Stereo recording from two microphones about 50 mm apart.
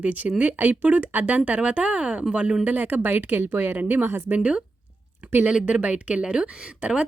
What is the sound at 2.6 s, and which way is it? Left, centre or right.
Speech, right.